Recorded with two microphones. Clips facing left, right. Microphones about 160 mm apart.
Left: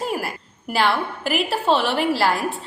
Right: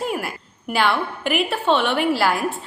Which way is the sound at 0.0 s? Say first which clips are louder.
Even; centre (ahead or behind).